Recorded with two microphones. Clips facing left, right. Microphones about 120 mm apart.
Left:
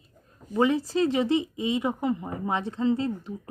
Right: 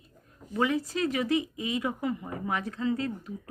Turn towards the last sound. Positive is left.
turn(degrees=25)  # may be behind; listen again after turning